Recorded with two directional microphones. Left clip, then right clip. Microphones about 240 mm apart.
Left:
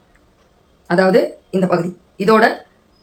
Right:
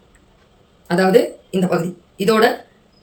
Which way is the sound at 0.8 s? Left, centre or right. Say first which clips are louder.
Left 1 dB; centre.